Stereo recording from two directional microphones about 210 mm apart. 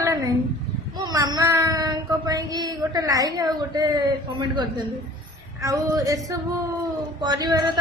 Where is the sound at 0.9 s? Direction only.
20° right (ahead or behind).